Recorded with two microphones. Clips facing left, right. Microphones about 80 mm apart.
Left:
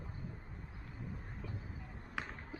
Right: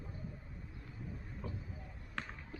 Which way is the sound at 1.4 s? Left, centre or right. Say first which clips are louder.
Right 3 dB; right.